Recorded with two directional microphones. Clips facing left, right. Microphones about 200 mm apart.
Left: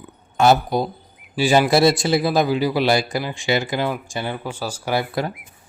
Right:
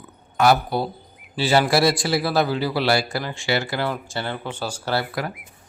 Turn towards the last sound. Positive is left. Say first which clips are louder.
# left 4 dB
turn(degrees=25)  # may be behind; listen again after turning